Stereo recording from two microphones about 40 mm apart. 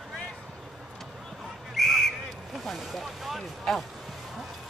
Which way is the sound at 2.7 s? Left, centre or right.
Centre.